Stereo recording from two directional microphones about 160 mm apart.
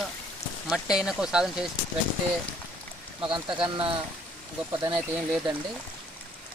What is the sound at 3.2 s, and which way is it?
Speech, 30° right (ahead or behind).